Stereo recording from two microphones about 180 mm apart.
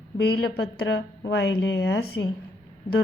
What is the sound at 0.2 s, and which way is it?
A woman's voice, 65° left (ahead or behind).